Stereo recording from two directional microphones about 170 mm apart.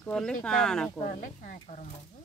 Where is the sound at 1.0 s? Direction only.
50° left (ahead or behind).